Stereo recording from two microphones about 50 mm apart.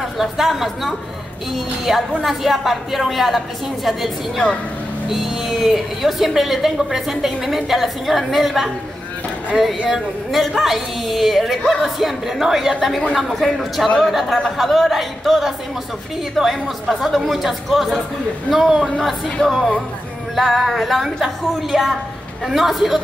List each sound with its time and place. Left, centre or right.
0.2 s a woman's voice: centre
4.4 s speech: centre
5.1 s a woman's voice: centre
9.8 s a woman's voice: centre